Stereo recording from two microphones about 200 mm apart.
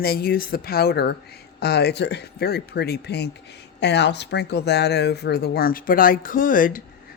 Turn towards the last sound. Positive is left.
turn(degrees=45)  # may be behind; listen again after turning